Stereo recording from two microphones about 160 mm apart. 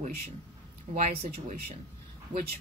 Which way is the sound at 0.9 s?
55° right (ahead or behind).